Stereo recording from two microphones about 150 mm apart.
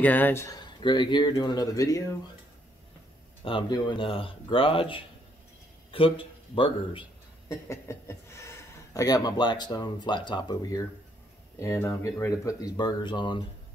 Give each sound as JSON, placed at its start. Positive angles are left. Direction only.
{"t": 0.0, "sound": "a man's voice", "side_deg": 10}
{"t": 3.4, "sound": "a man's voice", "side_deg": 35}
{"t": 7.4, "sound": "a man's voice", "side_deg": 20}